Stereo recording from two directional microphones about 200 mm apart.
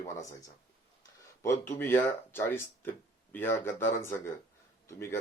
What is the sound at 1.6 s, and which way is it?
Speech, 10° left (ahead or behind).